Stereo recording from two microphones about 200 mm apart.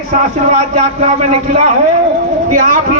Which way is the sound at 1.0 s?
35° right (ahead or behind).